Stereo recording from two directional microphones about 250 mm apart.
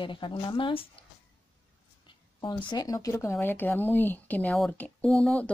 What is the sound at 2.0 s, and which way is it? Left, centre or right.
Speech, centre.